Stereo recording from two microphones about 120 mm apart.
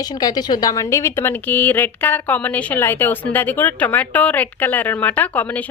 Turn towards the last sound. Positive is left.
turn(degrees=15)  # may be behind; listen again after turning